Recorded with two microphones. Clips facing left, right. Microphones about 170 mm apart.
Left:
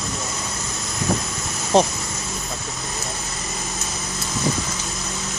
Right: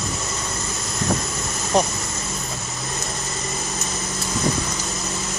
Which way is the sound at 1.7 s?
30° left (ahead or behind).